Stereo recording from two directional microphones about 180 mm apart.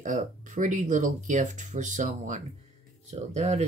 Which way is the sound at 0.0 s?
45° right (ahead or behind).